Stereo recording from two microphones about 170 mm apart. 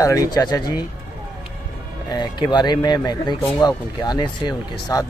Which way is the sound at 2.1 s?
25° left (ahead or behind).